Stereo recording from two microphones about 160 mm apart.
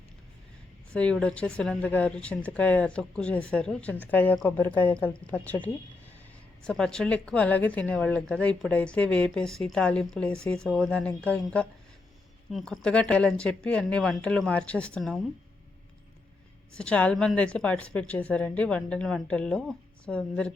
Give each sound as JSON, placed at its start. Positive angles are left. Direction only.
{"t": 0.9, "sound": "a woman's voice", "side_deg": 5}
{"t": 16.7, "sound": "a woman's voice", "side_deg": 5}